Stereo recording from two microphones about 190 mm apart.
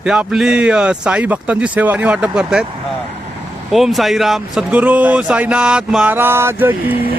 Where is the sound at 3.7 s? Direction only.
Centre (ahead or behind).